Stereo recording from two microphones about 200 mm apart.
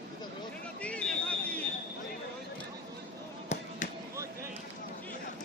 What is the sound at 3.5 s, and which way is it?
Basketball bounce, 35° left (ahead or behind).